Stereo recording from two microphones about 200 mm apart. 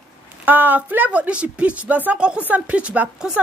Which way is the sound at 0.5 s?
10° right (ahead or behind).